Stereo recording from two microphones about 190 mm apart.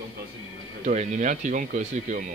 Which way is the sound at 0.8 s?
40° right (ahead or behind).